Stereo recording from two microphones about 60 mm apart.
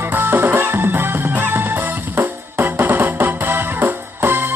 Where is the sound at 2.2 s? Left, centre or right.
Right.